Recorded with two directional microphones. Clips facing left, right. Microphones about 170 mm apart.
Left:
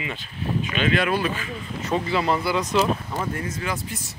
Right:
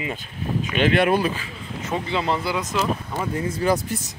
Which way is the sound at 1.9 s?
15° right (ahead or behind).